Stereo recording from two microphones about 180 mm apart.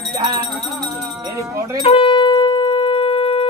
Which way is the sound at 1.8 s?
30° left (ahead or behind).